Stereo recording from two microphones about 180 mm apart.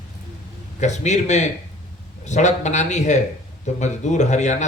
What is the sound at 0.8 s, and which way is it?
A man's voice, 40° left (ahead or behind).